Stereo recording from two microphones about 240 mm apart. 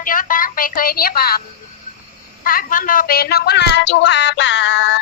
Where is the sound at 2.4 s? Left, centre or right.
Left.